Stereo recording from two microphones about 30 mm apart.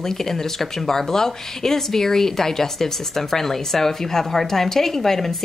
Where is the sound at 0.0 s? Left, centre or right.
Centre.